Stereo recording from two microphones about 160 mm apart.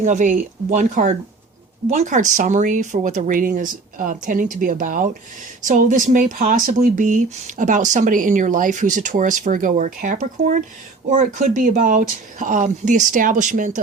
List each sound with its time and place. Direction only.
0.0 s speech: 55° right (ahead or behind)